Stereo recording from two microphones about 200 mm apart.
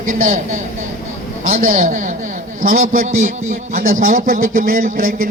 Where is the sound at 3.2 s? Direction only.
35° right (ahead or behind).